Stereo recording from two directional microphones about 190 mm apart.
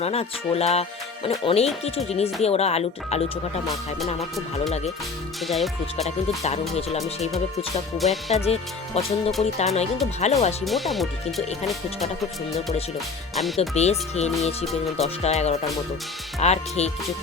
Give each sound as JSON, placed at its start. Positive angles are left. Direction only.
{"t": 0.0, "sound": "speech", "side_deg": 30}
{"t": 4.2, "sound": "speech", "side_deg": 0}
{"t": 6.1, "sound": "speech", "side_deg": 35}
{"t": 7.9, "sound": "speech", "side_deg": 0}
{"t": 9.0, "sound": "speech", "side_deg": 30}
{"t": 10.7, "sound": "speech", "side_deg": 0}
{"t": 13.6, "sound": "speech", "side_deg": 35}